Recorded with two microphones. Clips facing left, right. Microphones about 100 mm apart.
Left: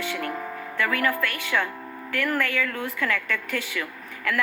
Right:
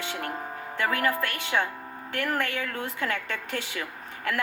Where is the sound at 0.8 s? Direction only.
30° right (ahead or behind).